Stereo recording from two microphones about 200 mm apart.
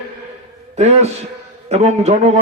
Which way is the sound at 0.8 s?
30° right (ahead or behind).